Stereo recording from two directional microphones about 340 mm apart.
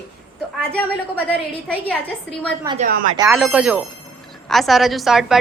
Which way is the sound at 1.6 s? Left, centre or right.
Centre.